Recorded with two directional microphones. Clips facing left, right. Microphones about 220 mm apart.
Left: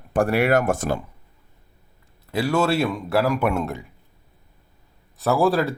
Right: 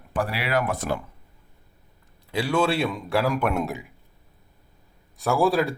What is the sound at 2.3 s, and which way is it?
A man's voice, 5° left (ahead or behind).